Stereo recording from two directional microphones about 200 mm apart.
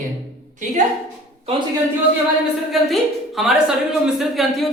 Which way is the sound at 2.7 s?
Centre (ahead or behind).